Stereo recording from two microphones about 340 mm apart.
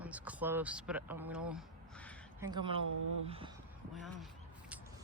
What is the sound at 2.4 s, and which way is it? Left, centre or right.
Speech, centre.